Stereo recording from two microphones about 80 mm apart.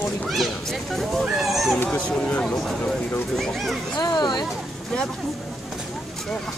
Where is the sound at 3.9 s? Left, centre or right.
Left.